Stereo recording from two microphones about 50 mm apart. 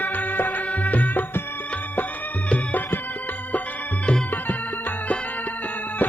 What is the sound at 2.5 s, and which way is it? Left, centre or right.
Music, left.